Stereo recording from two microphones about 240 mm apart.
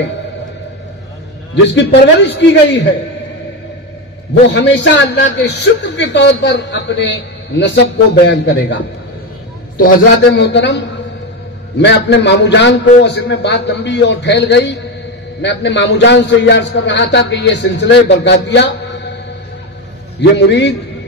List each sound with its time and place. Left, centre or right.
1.5 s a man's voice: left
4.5 s a man's voice: left
9.8 s a man's voice: left
11.8 s a man's voice: left
20.2 s a man's voice: left